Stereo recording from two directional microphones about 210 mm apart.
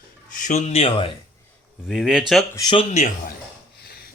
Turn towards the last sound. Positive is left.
turn(degrees=35)  # may be behind; listen again after turning